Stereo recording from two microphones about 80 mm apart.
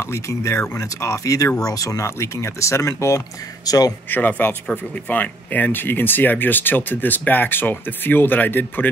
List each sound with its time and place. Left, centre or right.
0.0 s speech: left
3.6 s a man's voice: left
4.1 s speech: left